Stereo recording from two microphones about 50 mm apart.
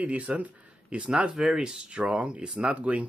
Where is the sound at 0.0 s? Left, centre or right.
Right.